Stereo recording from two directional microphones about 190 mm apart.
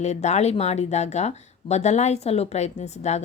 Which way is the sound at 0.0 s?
35° left (ahead or behind).